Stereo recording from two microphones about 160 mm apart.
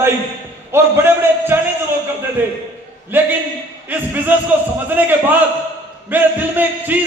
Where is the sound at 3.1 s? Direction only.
15° right (ahead or behind).